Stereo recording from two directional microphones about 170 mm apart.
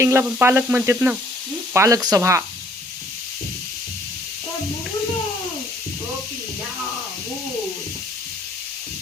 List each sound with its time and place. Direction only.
0.0 s speech: 15° right (ahead or behind)